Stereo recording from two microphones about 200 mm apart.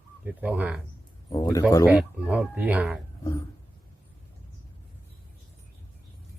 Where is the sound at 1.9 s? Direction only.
5° right (ahead or behind).